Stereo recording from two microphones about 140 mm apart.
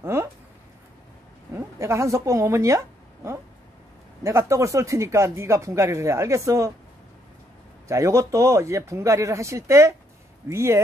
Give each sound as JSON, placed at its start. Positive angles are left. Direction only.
{"t": 0.0, "sound": "speech", "side_deg": -20}
{"t": 1.5, "sound": "speech", "side_deg": -20}
{"t": 4.2, "sound": "speech", "side_deg": -20}
{"t": 7.9, "sound": "speech", "side_deg": -20}